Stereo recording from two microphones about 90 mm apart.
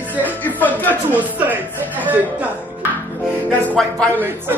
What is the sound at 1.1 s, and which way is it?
Speech, 20° right (ahead or behind).